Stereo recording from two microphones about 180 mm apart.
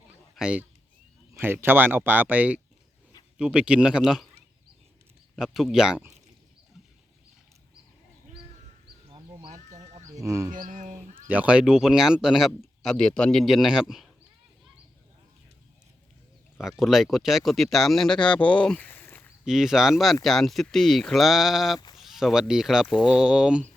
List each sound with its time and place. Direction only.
0.3 s speech: 5° right (ahead or behind)
5.4 s speech: centre (ahead or behind)
9.4 s sheep: 40° right (ahead or behind)
10.1 s speech: 20° right (ahead or behind)
10.5 s speech: 45° right (ahead or behind)
11.3 s speech: 10° right (ahead or behind)
16.6 s speech: centre (ahead or behind)
19.5 s speech: centre (ahead or behind)